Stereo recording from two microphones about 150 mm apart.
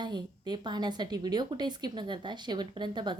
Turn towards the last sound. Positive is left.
turn(degrees=-30)  # may be behind; listen again after turning